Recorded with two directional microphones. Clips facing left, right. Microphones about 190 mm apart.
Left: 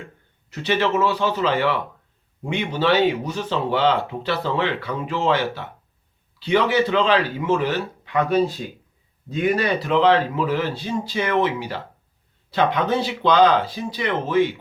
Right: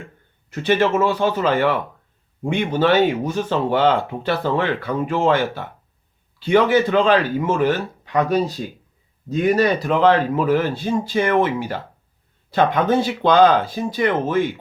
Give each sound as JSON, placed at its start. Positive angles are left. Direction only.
{"t": 0.5, "sound": "speech", "side_deg": -50}